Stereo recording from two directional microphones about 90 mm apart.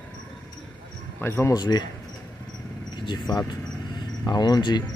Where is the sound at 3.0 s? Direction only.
50° left (ahead or behind).